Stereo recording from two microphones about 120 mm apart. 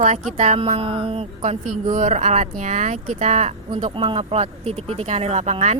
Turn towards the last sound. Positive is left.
turn(degrees=-70)  # may be behind; listen again after turning